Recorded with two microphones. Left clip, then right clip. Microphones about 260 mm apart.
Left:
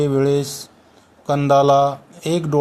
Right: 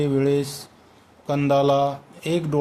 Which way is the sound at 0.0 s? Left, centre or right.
Centre.